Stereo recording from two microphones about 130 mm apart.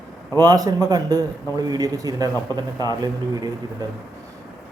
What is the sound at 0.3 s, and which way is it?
A man's voice, 30° right (ahead or behind).